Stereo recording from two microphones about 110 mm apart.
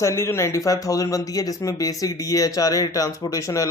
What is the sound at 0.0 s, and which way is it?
Speech, 25° left (ahead or behind).